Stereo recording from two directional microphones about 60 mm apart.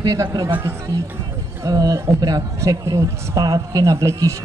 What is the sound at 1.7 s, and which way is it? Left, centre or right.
A man's voice, right.